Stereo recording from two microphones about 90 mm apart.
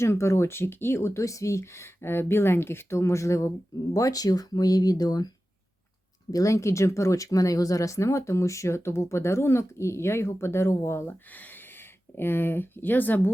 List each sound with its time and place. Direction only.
0.0 s speech: 30° left (ahead or behind)
6.3 s speech: 35° left (ahead or behind)